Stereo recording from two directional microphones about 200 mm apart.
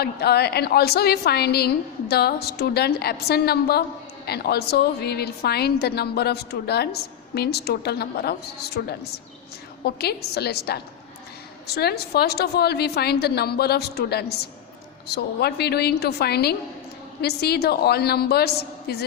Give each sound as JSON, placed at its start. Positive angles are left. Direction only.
{"t": 0.0, "sound": "a woman's voice", "side_deg": 55}